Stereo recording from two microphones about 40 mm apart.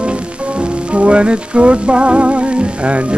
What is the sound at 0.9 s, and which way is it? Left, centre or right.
Music, right.